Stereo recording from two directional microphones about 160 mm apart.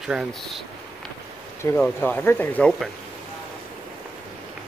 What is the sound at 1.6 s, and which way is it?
Speech, 10° left (ahead or behind).